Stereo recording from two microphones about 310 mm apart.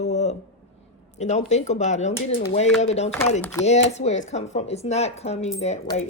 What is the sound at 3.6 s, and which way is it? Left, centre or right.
Speech, left.